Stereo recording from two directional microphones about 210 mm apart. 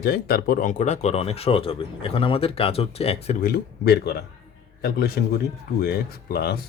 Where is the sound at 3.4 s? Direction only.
50° left (ahead or behind).